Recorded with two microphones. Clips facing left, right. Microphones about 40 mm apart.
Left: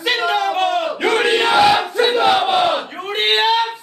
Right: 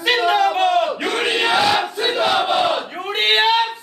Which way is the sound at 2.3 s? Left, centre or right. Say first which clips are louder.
Left 2 dB; centre.